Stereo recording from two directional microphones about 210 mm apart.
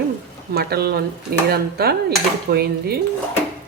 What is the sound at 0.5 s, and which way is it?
Speech, 50° right (ahead or behind).